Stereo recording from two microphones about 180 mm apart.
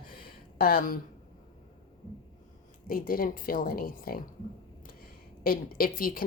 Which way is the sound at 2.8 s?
50° left (ahead or behind).